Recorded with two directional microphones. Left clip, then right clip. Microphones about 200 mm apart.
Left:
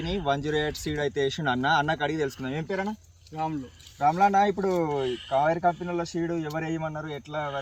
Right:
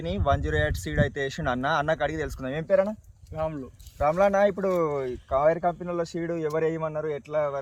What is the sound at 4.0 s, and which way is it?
Speech, 10° right (ahead or behind).